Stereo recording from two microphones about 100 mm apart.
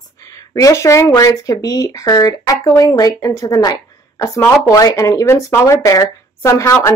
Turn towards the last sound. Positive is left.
turn(degrees=30)  # may be behind; listen again after turning